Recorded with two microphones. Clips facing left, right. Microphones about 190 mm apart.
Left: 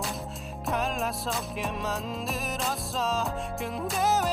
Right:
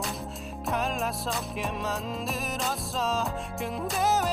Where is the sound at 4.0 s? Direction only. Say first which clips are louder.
Even; centre (ahead or behind).